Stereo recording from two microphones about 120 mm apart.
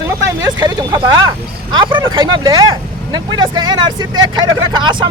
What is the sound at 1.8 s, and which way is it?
Speech, 40° right (ahead or behind).